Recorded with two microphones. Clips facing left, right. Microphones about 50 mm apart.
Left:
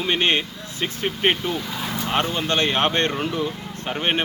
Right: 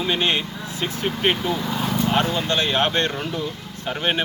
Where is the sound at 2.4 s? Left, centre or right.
Left.